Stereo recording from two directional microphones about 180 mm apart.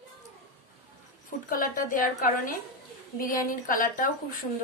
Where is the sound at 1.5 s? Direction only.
50° left (ahead or behind).